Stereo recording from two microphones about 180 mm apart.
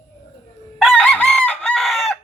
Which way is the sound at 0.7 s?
5° left (ahead or behind).